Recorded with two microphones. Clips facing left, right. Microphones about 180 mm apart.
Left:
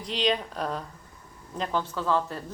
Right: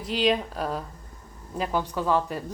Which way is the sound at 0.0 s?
5° right (ahead or behind).